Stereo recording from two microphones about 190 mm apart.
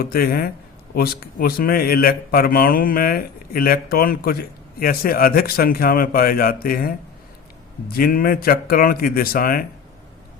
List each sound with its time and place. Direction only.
0.0 s speech: 50° left (ahead or behind)